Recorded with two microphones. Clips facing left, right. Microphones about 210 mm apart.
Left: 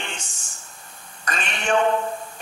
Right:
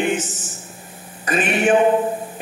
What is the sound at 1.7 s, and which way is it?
Speech, 15° right (ahead or behind).